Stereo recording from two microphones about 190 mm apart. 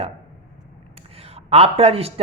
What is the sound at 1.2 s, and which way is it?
Speech, 30° right (ahead or behind).